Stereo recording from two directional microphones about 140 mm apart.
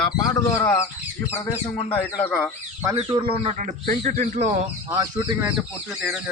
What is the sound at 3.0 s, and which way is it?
Speech, 40° right (ahead or behind).